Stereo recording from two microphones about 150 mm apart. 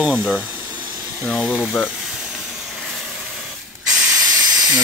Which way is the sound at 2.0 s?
5° right (ahead or behind).